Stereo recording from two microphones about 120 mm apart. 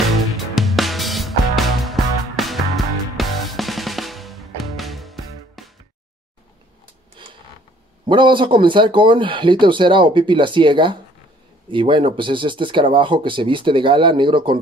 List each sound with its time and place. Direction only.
0.6 s music: centre (ahead or behind)
8.1 s speech: 40° right (ahead or behind)